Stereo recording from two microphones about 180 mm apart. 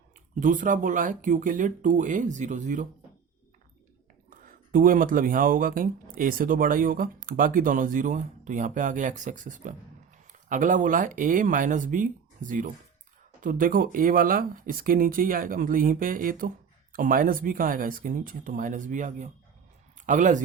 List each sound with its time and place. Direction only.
0.3 s speech: 45° right (ahead or behind)
4.4 s speech: 50° right (ahead or behind)